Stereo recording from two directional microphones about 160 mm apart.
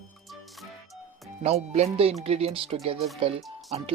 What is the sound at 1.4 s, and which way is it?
Speech, 45° right (ahead or behind).